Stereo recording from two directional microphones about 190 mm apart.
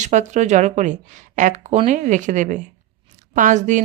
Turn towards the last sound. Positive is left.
turn(degrees=-40)  # may be behind; listen again after turning